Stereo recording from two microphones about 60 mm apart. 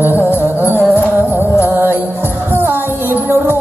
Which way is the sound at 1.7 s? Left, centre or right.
Right.